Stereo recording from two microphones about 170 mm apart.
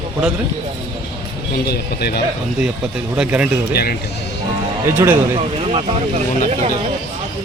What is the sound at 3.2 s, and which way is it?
Speech, 5° right (ahead or behind).